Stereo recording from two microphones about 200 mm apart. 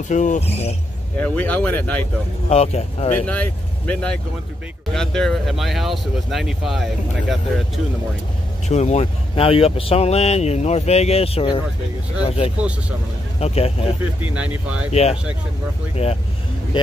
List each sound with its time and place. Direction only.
0.1 s speech: 40° left (ahead or behind)
1.1 s speech: 5° left (ahead or behind)
2.5 s speech: 30° left (ahead or behind)
3.2 s speech: 10° left (ahead or behind)
8.6 s speech: 35° left (ahead or behind)
14.2 s speech: 5° right (ahead or behind)
14.9 s speech: 30° left (ahead or behind)